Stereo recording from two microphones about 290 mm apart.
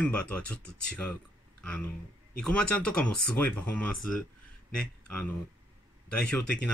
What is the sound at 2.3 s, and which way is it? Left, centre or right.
Speech, centre.